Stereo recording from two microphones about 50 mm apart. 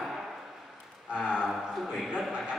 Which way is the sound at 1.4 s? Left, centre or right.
Centre.